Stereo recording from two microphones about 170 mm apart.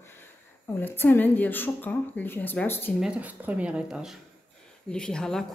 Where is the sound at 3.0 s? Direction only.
5° right (ahead or behind).